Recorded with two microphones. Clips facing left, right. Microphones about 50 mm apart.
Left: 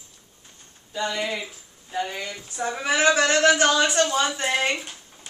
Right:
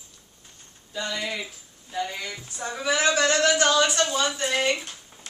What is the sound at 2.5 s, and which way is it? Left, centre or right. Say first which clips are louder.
A woman's voice: left 2 dB; left.